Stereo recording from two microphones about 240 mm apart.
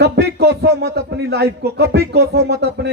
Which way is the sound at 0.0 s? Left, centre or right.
Right.